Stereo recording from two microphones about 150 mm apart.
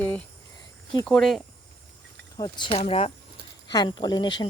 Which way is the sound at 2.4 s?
30° left (ahead or behind).